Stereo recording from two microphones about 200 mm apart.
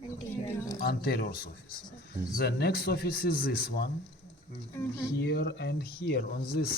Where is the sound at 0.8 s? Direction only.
50° left (ahead or behind).